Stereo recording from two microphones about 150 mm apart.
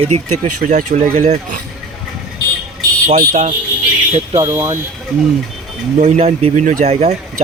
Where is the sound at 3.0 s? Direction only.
55° right (ahead or behind).